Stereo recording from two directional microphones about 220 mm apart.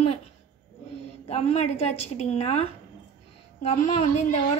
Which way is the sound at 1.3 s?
30° left (ahead or behind).